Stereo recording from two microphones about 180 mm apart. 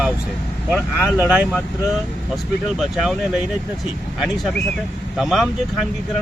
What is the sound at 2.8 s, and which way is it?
Speech, centre (ahead or behind).